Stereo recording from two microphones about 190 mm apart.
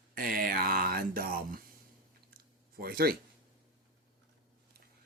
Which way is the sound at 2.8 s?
55° right (ahead or behind).